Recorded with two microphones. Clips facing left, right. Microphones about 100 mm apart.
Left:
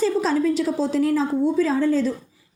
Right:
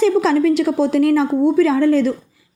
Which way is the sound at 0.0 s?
75° right (ahead or behind).